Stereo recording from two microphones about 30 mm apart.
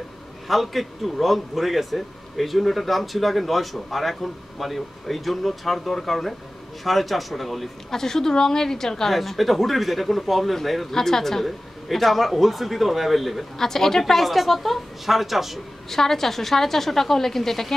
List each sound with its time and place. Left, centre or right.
0.5 s a man's voice: centre
7.9 s a woman's voice: centre
9.1 s a man's voice: centre
11.4 s a man's voice: centre
13.6 s a woman's voice: centre
14.2 s a man's voice: centre
15.9 s a woman's voice: centre